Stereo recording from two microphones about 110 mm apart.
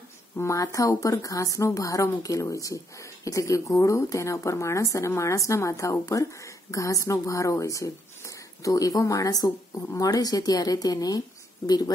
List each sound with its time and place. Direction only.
0.4 s a woman's voice: 30° left (ahead or behind)